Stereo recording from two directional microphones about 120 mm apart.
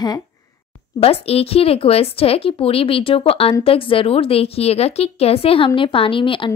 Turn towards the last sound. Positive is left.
turn(degrees=45)  # may be behind; listen again after turning